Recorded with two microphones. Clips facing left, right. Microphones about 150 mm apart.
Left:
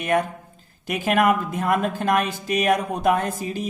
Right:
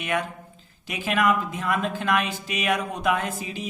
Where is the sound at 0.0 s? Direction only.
45° left (ahead or behind).